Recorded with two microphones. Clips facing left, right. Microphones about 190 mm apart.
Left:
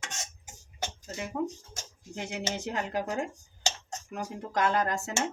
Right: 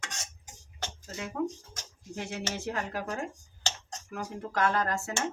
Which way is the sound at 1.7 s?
15° left (ahead or behind).